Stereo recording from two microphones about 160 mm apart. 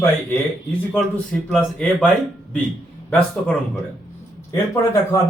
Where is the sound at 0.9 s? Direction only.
5° left (ahead or behind).